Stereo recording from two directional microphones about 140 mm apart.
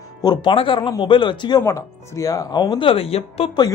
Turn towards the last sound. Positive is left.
turn(degrees=45)  # may be behind; listen again after turning